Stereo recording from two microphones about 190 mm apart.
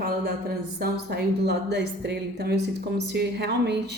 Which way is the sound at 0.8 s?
60° right (ahead or behind).